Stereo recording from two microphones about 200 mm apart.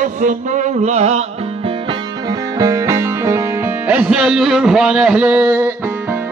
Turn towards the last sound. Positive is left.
turn(degrees=-10)  # may be behind; listen again after turning